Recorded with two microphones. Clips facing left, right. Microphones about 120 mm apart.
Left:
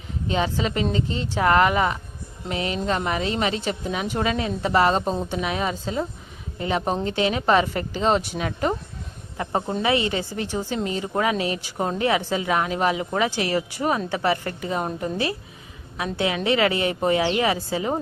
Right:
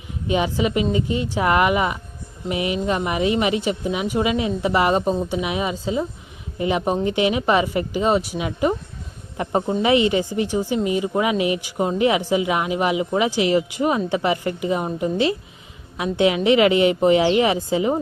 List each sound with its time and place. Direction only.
0.3 s a woman's voice: 15° right (ahead or behind)